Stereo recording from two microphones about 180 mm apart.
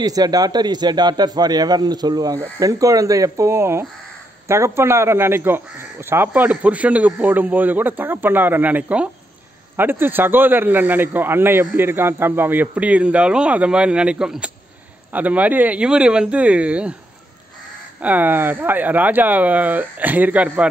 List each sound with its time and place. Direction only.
0.0 s a man's voice: 20° right (ahead or behind)
18.0 s a man's voice: 10° right (ahead or behind)